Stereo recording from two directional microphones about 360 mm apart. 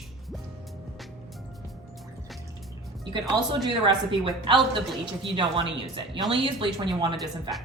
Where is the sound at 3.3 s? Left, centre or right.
Centre.